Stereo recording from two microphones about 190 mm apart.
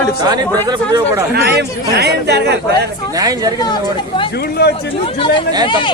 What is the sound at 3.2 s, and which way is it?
Speech, 20° right (ahead or behind).